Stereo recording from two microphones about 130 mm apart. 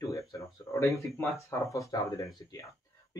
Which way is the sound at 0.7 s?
25° left (ahead or behind).